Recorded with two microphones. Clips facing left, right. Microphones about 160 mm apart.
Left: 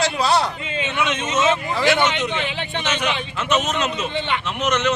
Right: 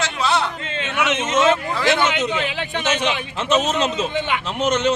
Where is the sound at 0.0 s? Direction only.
35° left (ahead or behind).